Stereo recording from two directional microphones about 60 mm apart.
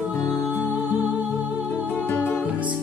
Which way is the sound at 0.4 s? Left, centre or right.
Left.